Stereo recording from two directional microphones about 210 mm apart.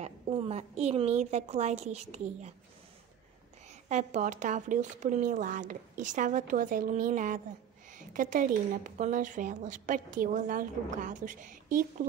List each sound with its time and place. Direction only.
0.0 s a woman's voice: 30° right (ahead or behind)
3.6 s a woman's voice: 35° right (ahead or behind)